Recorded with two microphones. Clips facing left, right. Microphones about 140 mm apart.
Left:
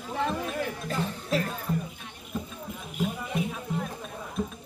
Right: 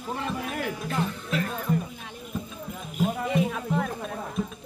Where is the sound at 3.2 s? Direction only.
90° right.